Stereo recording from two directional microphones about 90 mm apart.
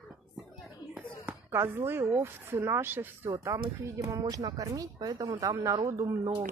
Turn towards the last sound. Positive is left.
turn(degrees=-35)  # may be behind; listen again after turning